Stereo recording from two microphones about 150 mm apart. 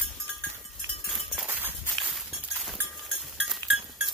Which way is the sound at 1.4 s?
15° right (ahead or behind).